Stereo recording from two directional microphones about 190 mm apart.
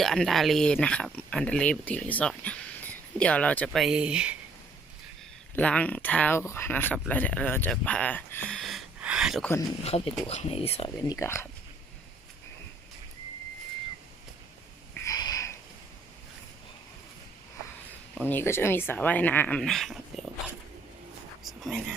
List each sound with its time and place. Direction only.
0.0 s speech: centre (ahead or behind)
5.5 s speech: 5° left (ahead or behind)
9.8 s speech: 30° left (ahead or behind)
11.0 s speech: 15° left (ahead or behind)
15.0 s a sound: 20° left (ahead or behind)
18.1 s speech: 10° left (ahead or behind)
21.4 s a sound: centre (ahead or behind)